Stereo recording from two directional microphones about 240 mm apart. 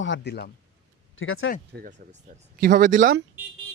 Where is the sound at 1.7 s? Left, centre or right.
Right.